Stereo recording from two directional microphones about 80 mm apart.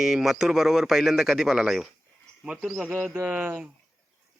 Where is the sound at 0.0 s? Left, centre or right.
Centre.